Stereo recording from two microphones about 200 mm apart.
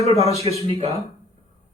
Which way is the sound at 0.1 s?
30° right (ahead or behind).